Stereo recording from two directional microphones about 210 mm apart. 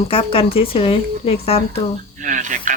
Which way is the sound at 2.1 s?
35° right (ahead or behind).